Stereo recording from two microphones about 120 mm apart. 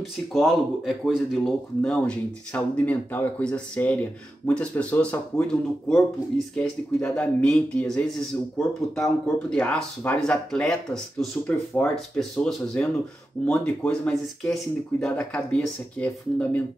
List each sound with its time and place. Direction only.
0.3 s speech: centre (ahead or behind)
1.8 s speech: 10° left (ahead or behind)